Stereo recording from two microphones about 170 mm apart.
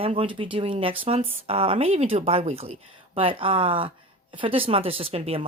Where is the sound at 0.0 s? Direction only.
35° right (ahead or behind).